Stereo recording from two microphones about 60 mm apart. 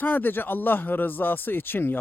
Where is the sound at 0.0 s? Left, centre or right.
Left.